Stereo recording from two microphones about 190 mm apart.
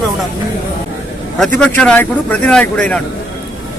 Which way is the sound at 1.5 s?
5° left (ahead or behind).